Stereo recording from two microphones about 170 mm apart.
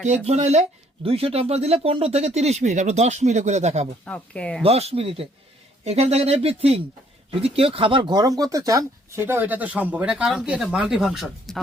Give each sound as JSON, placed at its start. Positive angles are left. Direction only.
{"t": 0.0, "sound": "speech", "side_deg": -45}
{"t": 4.0, "sound": "speech", "side_deg": 5}
{"t": 4.6, "sound": "speech", "side_deg": -35}